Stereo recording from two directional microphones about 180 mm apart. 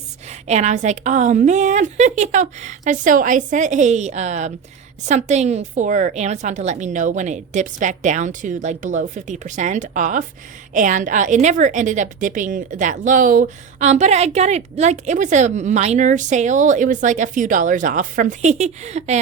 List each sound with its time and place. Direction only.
0.3 s a woman's voice: 40° right (ahead or behind)